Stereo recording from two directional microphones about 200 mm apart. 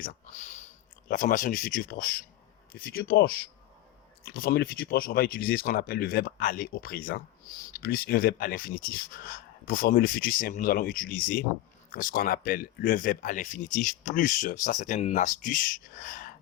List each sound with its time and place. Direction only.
0.0 s speech: 40° left (ahead or behind)
4.3 s speech: 50° left (ahead or behind)